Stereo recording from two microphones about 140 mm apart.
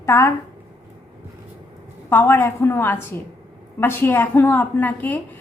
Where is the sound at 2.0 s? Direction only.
15° left (ahead or behind).